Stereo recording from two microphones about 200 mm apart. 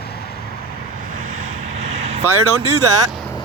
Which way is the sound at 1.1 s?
35° right (ahead or behind).